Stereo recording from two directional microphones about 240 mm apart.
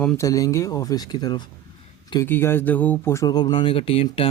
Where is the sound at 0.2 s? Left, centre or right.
Centre.